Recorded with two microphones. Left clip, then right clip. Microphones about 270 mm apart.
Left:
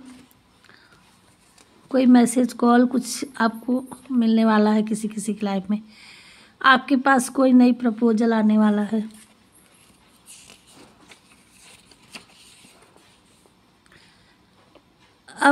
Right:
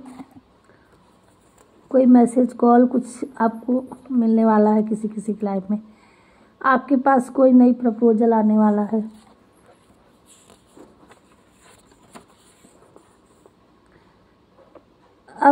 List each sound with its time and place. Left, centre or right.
1.9 s a woman's voice: left
3.6 s a woman's voice: left